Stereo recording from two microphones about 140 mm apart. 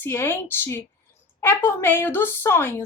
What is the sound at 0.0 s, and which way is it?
Speech, 20° left (ahead or behind).